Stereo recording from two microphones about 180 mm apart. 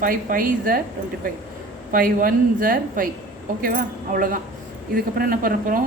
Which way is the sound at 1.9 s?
50° right (ahead or behind).